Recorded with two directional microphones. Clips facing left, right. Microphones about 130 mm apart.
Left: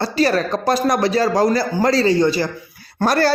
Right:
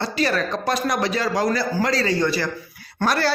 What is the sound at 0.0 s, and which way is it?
Speech, 40° left (ahead or behind).